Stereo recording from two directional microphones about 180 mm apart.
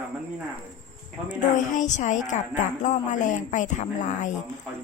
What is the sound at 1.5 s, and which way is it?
A woman's voice, 45° left (ahead or behind).